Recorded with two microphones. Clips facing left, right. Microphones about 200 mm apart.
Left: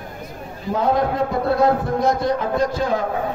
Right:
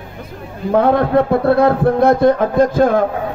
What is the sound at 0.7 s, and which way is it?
A man's voice, 60° right (ahead or behind).